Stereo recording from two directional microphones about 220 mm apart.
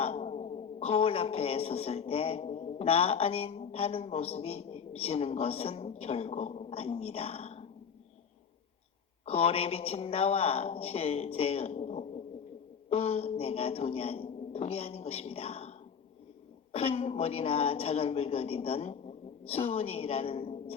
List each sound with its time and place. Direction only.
0.0 s speech: 30° left (ahead or behind)
9.2 s a woman's voice: 25° left (ahead or behind)
16.7 s a woman's voice: 25° left (ahead or behind)